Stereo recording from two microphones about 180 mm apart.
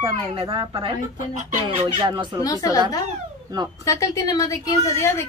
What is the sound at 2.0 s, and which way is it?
Speech, 25° right (ahead or behind).